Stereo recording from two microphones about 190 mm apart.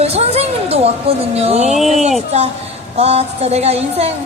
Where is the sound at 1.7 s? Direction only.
Centre (ahead or behind).